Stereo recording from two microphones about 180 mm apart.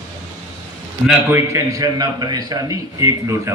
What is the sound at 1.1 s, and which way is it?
A man's voice, 15° right (ahead or behind).